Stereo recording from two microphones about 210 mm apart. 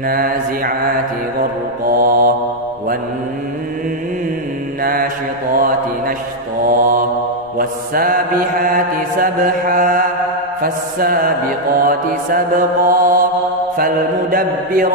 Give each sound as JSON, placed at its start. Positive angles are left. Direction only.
{"t": 0.1, "sound": "mantra", "side_deg": -45}
{"t": 1.9, "sound": "mantra", "side_deg": -45}
{"t": 5.5, "sound": "mantra", "side_deg": -40}